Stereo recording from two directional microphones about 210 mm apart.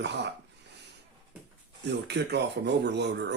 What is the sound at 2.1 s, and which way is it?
Speech, 55° right (ahead or behind).